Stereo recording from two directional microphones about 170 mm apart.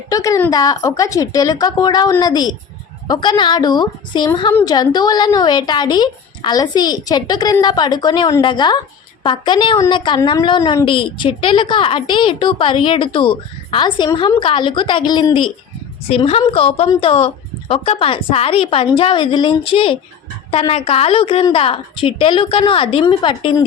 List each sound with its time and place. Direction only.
0.1 s a woman's voice: 20° left (ahead or behind)